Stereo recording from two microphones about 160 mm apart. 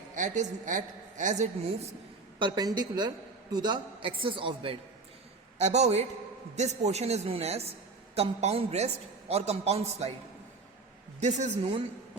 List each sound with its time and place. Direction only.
0.2 s a woman's voice: 55° right (ahead or behind)
2.4 s a woman's voice: 25° right (ahead or behind)
5.5 s a woman's voice: 45° right (ahead or behind)
11.2 s a woman's voice: 45° right (ahead or behind)